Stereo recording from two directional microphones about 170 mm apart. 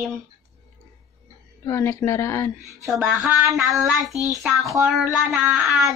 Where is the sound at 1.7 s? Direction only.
15° left (ahead or behind).